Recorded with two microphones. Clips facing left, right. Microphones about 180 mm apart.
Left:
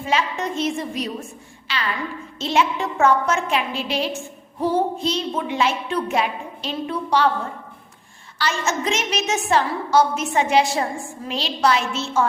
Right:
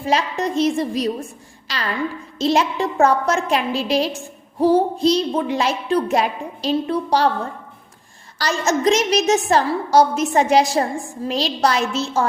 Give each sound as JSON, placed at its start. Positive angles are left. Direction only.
{"t": 0.0, "sound": "a woman's voice", "side_deg": -35}
{"t": 8.4, "sound": "a woman's voice", "side_deg": -40}